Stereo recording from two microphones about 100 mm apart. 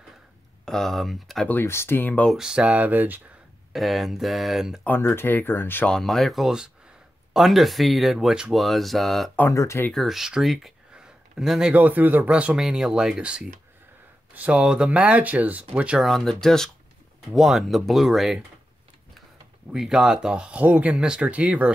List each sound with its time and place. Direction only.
0.7 s speech: 5° left (ahead or behind)
1.5 s speech: 25° left (ahead or behind)
2.3 s speech: 5° right (ahead or behind)
3.7 s speech: centre (ahead or behind)
4.8 s speech: 20° left (ahead or behind)
5.9 s speech: 5° left (ahead or behind)
9.5 s speech: 30° left (ahead or behind)
9.9 s speech: centre (ahead or behind)
11.7 s speech: 15° right (ahead or behind)
16.1 s speech: centre (ahead or behind)
19.7 s speech: 5° right (ahead or behind)